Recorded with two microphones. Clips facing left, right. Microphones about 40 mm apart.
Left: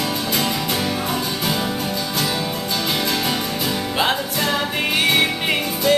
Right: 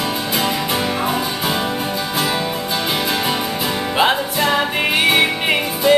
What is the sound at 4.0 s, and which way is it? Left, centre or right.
Music, centre.